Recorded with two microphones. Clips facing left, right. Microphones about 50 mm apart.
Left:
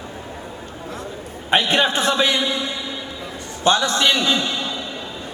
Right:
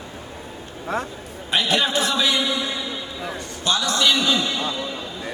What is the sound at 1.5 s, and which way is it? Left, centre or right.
A man's voice, left.